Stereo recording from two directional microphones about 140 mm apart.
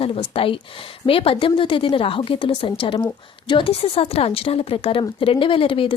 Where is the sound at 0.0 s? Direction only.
45° left (ahead or behind).